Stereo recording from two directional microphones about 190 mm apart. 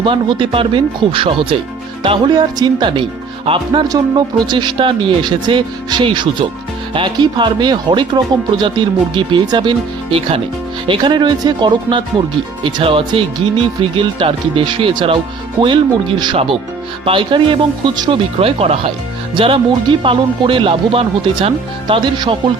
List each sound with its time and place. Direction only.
0.0 s speech: 25° right (ahead or behind)